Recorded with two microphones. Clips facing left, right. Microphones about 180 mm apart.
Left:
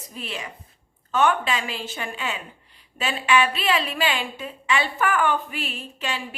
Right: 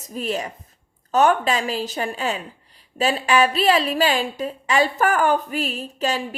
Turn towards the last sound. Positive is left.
turn(degrees=-40)  # may be behind; listen again after turning